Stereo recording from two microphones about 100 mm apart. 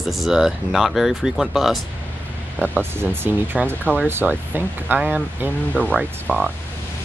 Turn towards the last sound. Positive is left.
turn(degrees=-15)  # may be behind; listen again after turning